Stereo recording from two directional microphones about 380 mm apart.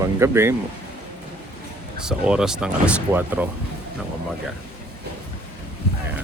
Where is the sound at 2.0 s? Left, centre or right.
Centre.